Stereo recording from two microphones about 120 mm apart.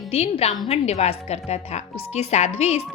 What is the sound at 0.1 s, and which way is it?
A woman's voice, 55° left (ahead or behind).